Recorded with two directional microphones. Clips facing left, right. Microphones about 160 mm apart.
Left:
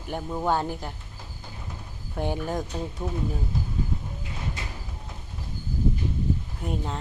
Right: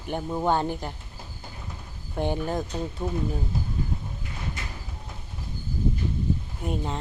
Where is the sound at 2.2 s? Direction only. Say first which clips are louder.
Right 1 dB; 5° left (ahead or behind).